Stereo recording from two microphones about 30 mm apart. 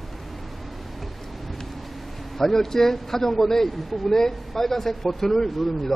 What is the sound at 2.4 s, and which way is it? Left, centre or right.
A man's voice, centre.